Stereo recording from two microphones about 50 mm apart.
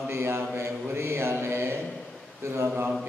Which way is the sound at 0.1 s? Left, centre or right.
Right.